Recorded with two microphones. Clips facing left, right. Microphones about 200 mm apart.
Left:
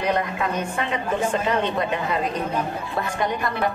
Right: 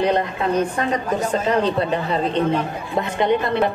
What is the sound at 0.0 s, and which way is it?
A woman's voice, 30° right (ahead or behind).